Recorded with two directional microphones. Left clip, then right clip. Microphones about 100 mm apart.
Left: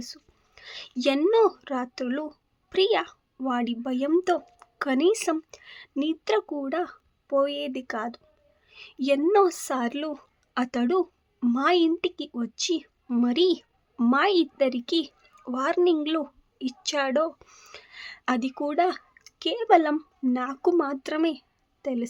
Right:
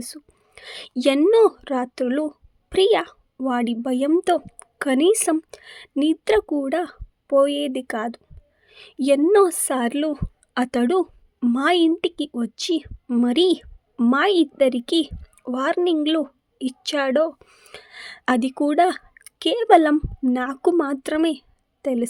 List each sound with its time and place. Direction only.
0.0 s a woman's voice: 55° right (ahead or behind)
8.7 s a sound: 45° right (ahead or behind)
9.3 s speech: 45° right (ahead or behind)
11.0 s a sound: 35° right (ahead or behind)
11.5 s speech: 55° right (ahead or behind)
14.1 s a woman's voice: 50° right (ahead or behind)
17.4 s speech: 25° right (ahead or behind)
17.7 s a woman's voice: 50° right (ahead or behind)